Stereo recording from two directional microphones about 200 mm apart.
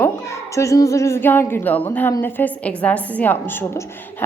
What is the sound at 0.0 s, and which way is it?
A child's voice, 15° left (ahead or behind).